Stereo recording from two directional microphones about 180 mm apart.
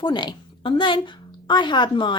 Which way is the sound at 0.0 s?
25° left (ahead or behind).